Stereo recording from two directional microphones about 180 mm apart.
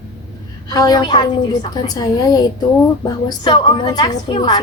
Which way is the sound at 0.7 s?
20° left (ahead or behind).